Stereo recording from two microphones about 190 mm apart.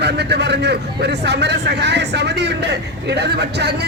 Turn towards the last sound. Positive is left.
turn(degrees=-60)  # may be behind; listen again after turning